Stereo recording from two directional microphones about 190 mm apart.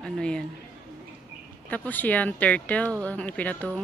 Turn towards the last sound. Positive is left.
turn(degrees=10)  # may be behind; listen again after turning